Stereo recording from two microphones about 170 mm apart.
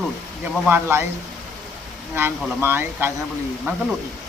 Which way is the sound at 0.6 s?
15° right (ahead or behind).